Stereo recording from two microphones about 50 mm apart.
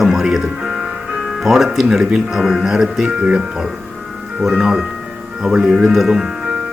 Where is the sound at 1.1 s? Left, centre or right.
Centre.